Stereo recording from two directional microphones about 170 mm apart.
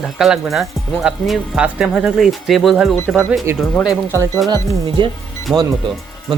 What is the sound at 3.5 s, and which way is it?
Speech, 15° right (ahead or behind).